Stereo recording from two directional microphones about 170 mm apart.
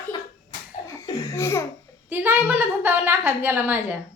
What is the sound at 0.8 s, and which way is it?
Laughter, 20° left (ahead or behind).